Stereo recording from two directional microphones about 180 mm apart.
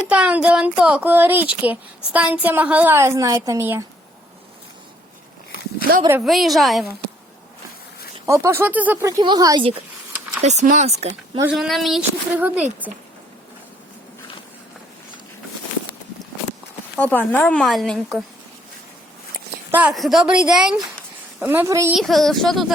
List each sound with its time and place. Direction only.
0.1 s a woman's voice: 5° right (ahead or behind)
6.2 s speech: centre (ahead or behind)
8.3 s a woman's voice: 15° right (ahead or behind)
10.4 s speech: 40° right (ahead or behind)
11.4 s speech: centre (ahead or behind)
17.0 s speech: 10° left (ahead or behind)
19.7 s a woman's voice: 5° right (ahead or behind)
21.9 s speech: centre (ahead or behind)